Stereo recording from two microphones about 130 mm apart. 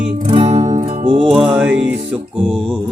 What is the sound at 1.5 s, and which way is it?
Music, 10° right (ahead or behind).